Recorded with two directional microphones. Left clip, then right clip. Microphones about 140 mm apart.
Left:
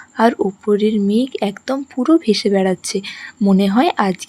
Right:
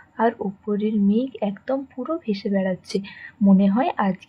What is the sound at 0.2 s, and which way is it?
A woman's voice, 40° left (ahead or behind).